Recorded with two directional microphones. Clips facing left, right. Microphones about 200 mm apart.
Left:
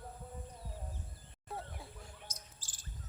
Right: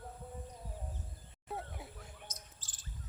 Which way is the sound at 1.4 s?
20° right (ahead or behind).